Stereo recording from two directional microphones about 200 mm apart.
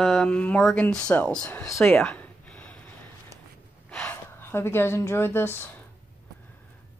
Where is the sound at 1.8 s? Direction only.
5° left (ahead or behind).